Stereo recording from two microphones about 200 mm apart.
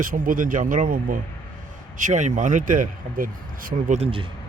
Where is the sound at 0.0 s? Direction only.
45° right (ahead or behind).